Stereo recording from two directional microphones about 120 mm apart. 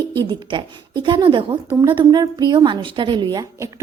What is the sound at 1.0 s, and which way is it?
A woman's voice, 45° right (ahead or behind).